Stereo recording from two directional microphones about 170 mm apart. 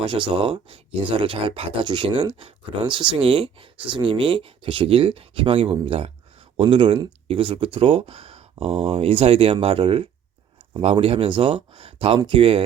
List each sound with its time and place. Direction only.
0.0 s speech: 30° right (ahead or behind)